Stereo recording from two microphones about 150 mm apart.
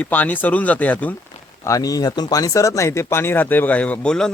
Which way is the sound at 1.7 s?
25° left (ahead or behind).